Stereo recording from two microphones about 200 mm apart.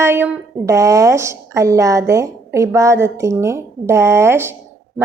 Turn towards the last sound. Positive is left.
turn(degrees=-10)  # may be behind; listen again after turning